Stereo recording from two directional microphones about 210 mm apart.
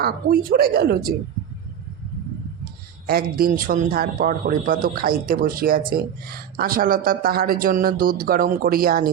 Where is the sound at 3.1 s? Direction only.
45° right (ahead or behind).